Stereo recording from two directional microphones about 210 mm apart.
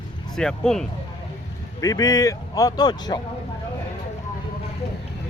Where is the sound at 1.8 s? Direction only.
15° left (ahead or behind).